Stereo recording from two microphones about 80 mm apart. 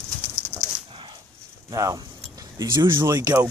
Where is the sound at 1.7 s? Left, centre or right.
Right.